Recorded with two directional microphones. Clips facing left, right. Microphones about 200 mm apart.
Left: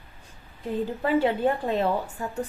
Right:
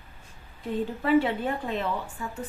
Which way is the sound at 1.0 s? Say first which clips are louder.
Left 1 dB; 35° left (ahead or behind).